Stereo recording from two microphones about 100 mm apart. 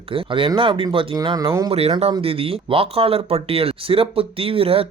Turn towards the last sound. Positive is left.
turn(degrees=-70)  # may be behind; listen again after turning